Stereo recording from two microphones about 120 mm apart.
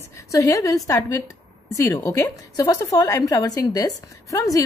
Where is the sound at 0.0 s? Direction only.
25° left (ahead or behind).